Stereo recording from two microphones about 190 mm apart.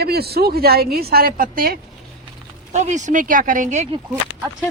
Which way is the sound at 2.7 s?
40° right (ahead or behind).